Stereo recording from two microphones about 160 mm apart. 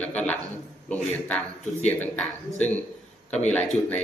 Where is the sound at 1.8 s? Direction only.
10° left (ahead or behind).